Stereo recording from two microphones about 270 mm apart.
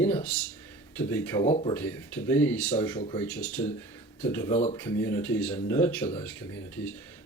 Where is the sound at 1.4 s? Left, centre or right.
Left.